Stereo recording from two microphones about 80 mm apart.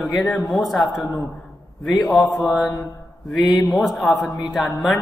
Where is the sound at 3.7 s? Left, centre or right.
Centre.